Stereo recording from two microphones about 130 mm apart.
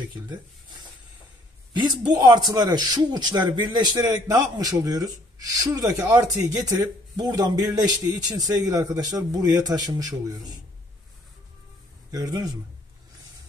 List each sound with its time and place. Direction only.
0.1 s a man's voice: 35° right (ahead or behind)
12.1 s speech: 30° right (ahead or behind)